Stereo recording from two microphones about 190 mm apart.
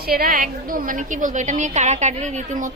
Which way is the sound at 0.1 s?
50° right (ahead or behind).